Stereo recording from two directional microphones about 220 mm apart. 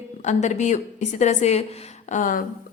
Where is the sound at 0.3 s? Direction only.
30° left (ahead or behind).